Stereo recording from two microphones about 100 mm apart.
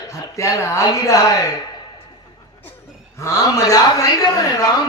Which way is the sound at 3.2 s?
30° left (ahead or behind).